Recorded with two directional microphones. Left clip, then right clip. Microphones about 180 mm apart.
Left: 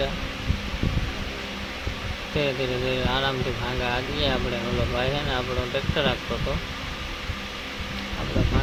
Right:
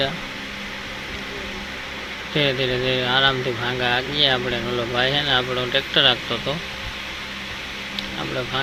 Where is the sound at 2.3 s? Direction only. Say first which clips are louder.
Right 5 dB; 5° right (ahead or behind).